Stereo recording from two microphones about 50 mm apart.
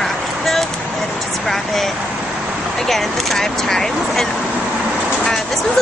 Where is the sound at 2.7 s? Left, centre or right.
Centre.